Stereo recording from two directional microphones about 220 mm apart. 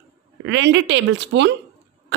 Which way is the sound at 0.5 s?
55° right (ahead or behind).